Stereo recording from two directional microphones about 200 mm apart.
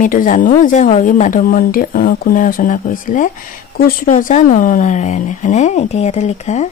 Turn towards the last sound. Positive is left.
turn(degrees=35)  # may be behind; listen again after turning